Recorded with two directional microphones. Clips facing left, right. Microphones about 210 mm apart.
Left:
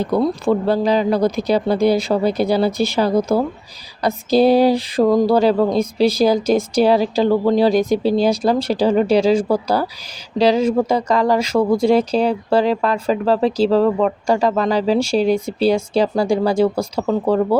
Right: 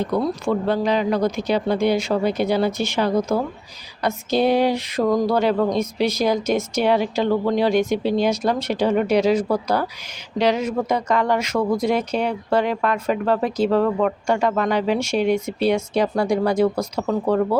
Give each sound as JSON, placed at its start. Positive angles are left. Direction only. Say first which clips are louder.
{"t": 0.0, "sound": "speech", "louder": "left 4 dB", "side_deg": 30}